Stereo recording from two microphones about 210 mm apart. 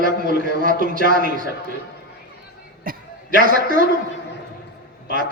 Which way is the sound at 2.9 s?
40° right (ahead or behind).